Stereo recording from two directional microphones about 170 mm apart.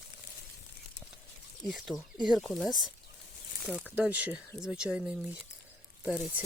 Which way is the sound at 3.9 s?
10° right (ahead or behind).